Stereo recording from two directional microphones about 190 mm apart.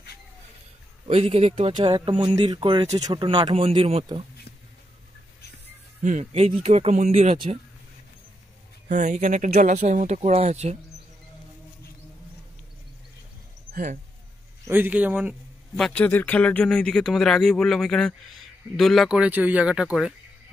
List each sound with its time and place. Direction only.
1.0 s speech: 30° right (ahead or behind)
6.0 s speech: 35° right (ahead or behind)
8.8 s speech: 40° right (ahead or behind)
14.6 s speech: 10° right (ahead or behind)